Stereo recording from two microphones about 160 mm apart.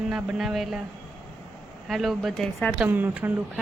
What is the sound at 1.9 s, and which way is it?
Speech, centre (ahead or behind).